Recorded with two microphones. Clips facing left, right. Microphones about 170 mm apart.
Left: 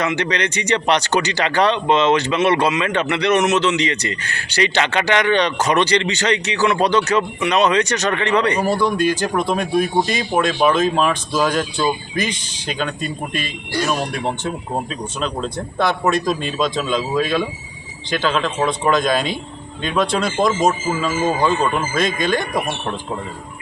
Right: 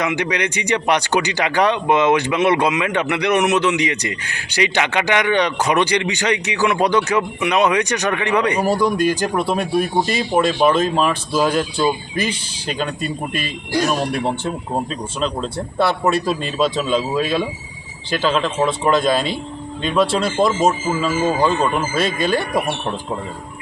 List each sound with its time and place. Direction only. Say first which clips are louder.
0.0 s speech: even; 10° right (ahead or behind)
13.3 s speech: right 2 dB; 40° right (ahead or behind)
15.2 s speech: right 1 dB; centre (ahead or behind)
21.9 s speech: even; 35° right (ahead or behind)